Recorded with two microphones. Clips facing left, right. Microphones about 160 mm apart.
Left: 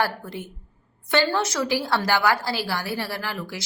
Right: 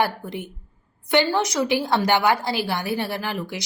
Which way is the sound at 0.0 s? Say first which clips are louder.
Right 2 dB; 20° right (ahead or behind).